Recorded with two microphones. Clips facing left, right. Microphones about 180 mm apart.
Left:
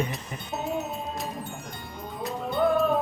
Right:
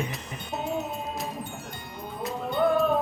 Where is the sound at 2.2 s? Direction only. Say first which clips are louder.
Even; 5° left (ahead or behind).